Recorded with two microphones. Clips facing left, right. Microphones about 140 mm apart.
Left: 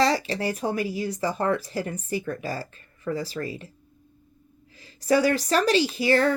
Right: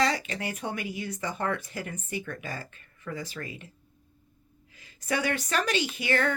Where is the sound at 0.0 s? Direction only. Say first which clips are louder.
Left 5 dB; 35° left (ahead or behind).